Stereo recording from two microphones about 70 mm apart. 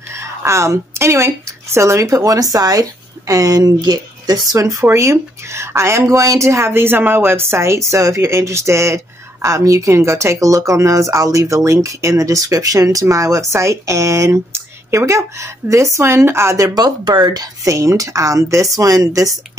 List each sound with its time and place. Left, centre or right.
0.1 s a woman's voice: right
4.6 s speech: right
16.6 s speech: right
17.6 s speech: right